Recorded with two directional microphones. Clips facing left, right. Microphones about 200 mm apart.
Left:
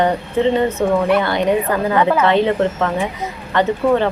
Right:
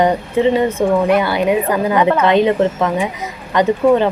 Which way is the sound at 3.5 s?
15° right (ahead or behind).